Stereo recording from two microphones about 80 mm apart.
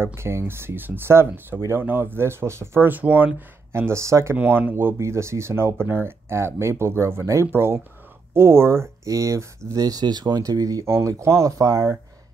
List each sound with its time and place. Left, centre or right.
0.0 s speech: right
4.4 s speech: right
11.1 s speech: right